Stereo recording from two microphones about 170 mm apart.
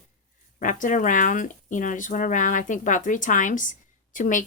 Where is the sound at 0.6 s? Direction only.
50° left (ahead or behind).